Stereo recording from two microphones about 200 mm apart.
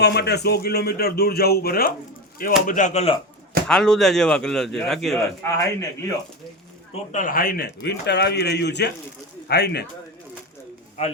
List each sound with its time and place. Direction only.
0.0 s a man's voice: 55° left (ahead or behind)
2.6 s speech: 40° left (ahead or behind)
3.7 s a man's voice: centre (ahead or behind)
5.5 s a man's voice: 15° left (ahead or behind)
7.1 s a man's voice: 40° left (ahead or behind)